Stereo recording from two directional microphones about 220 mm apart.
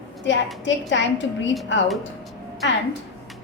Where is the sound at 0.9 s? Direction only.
55° left (ahead or behind).